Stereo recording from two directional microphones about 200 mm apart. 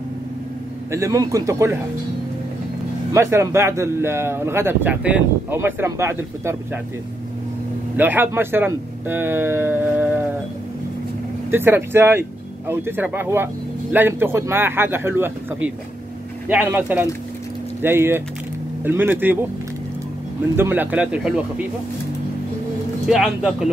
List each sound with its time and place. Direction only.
0.9 s speech: 15° right (ahead or behind)
3.1 s speech: 15° right (ahead or behind)
8.0 s speech: 10° right (ahead or behind)
11.5 s speech: 10° right (ahead or behind)
20.5 s speech: 10° right (ahead or behind)
23.0 s speech: 5° right (ahead or behind)